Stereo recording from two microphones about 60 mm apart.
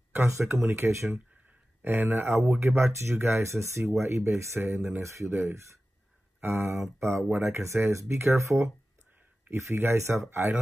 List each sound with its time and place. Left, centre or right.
0.1 s speech: right